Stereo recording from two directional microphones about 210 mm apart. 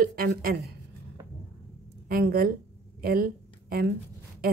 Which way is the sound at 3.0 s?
45° right (ahead or behind).